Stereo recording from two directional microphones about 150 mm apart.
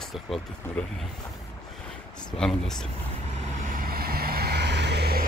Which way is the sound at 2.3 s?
5° left (ahead or behind).